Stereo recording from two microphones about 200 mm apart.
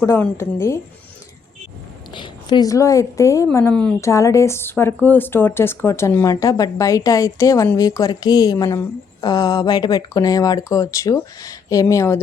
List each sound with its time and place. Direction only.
0.0 s speech: 15° left (ahead or behind)
2.1 s speech: 20° left (ahead or behind)